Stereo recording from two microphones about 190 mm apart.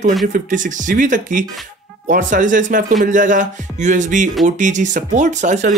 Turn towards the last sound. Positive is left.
turn(degrees=-40)  # may be behind; listen again after turning